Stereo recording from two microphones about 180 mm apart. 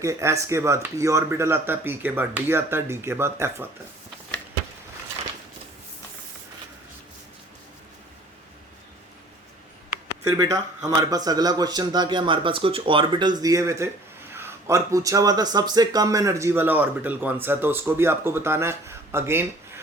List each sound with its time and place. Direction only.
0.0 s speech: 15° right (ahead or behind)
10.2 s speech: 20° right (ahead or behind)